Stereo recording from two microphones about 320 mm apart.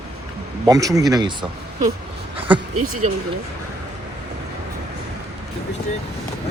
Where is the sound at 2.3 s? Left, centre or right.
Centre.